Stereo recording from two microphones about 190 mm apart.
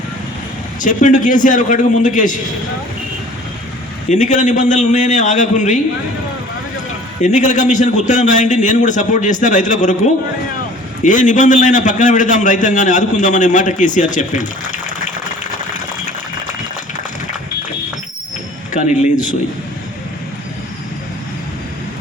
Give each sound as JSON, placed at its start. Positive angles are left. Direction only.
{"t": 0.8, "sound": "a man's voice", "side_deg": 40}
{"t": 4.1, "sound": "a man's voice", "side_deg": 40}
{"t": 7.2, "sound": "a man's voice", "side_deg": 40}
{"t": 18.7, "sound": "a man's voice", "side_deg": 40}